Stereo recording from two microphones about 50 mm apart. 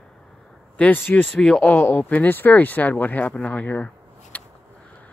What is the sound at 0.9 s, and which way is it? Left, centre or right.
Speech, left.